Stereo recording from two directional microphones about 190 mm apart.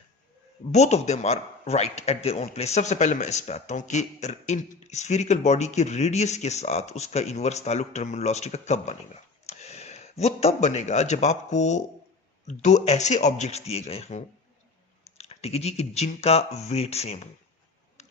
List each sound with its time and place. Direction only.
0.7 s speech: 35° left (ahead or behind)